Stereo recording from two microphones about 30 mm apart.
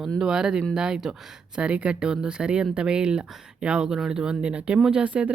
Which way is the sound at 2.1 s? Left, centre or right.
Right.